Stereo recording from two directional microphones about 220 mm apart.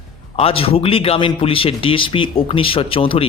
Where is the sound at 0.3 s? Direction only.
25° left (ahead or behind).